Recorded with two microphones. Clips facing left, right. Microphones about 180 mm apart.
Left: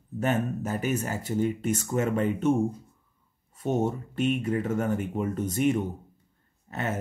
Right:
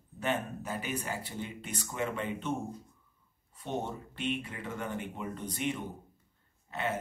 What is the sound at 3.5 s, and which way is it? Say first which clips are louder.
Speech: left 9 dB; 45° left (ahead or behind).